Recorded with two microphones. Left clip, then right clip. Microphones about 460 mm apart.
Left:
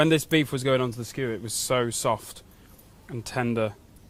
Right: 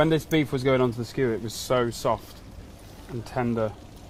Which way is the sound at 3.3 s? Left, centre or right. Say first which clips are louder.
Even; left.